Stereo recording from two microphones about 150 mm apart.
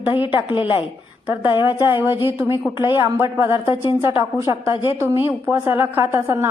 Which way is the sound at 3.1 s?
20° right (ahead or behind).